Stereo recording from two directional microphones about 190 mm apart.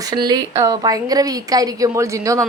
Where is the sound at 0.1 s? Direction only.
20° right (ahead or behind).